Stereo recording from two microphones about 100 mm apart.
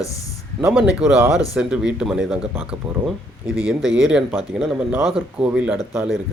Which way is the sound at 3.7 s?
5° right (ahead or behind).